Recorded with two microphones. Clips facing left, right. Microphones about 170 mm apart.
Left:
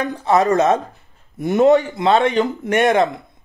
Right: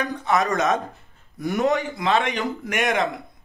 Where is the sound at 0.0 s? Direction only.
30° left (ahead or behind).